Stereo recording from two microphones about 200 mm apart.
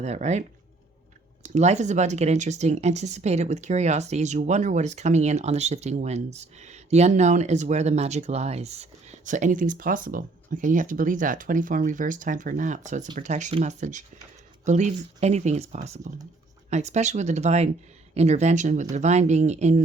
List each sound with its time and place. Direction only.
0.0 s speech: 35° right (ahead or behind)